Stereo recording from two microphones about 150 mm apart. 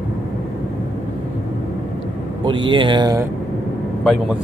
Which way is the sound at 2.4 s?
30° right (ahead or behind).